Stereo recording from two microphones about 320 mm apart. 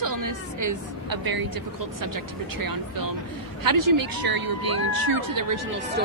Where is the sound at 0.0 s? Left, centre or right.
Right.